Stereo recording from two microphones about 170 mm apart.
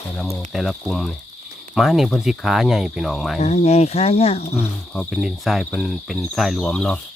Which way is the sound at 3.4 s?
40° left (ahead or behind).